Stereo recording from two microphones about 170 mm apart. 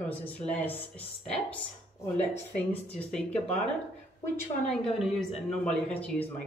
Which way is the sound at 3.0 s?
5° left (ahead or behind).